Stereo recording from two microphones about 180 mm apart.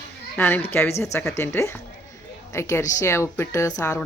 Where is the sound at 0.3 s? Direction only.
10° left (ahead or behind).